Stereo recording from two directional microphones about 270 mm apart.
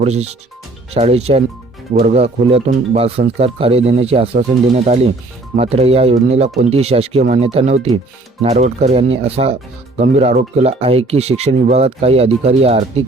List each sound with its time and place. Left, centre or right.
0.0 s speech: right